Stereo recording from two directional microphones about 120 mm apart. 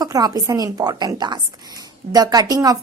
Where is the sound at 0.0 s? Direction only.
35° right (ahead or behind).